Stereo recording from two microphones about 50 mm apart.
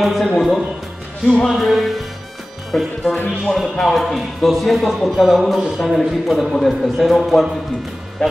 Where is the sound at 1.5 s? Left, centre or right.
Centre.